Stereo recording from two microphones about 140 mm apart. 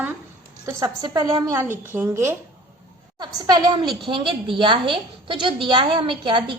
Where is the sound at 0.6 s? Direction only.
25° right (ahead or behind).